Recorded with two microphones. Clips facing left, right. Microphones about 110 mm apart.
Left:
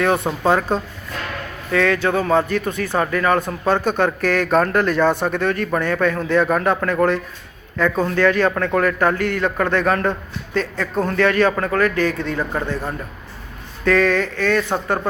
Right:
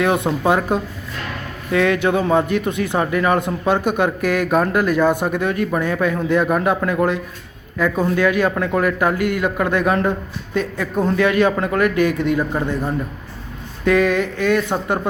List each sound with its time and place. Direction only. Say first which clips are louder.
0.0 s a man's voice: right 1 dB; 15° right (ahead or behind)